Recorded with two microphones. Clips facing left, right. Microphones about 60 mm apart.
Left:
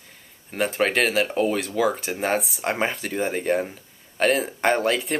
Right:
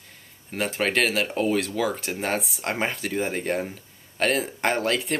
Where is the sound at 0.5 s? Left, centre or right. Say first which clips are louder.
Left 3 dB; centre.